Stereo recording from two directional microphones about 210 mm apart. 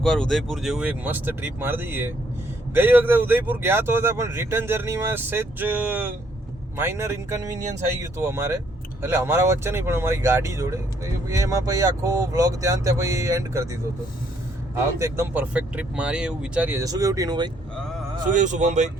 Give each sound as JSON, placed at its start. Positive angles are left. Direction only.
{"t": 0.0, "sound": "speech", "side_deg": 0}
{"t": 14.9, "sound": "speech", "side_deg": -15}
{"t": 18.3, "sound": "speech", "side_deg": -35}